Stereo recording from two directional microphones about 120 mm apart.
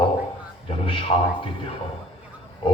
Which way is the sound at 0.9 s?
50° left (ahead or behind).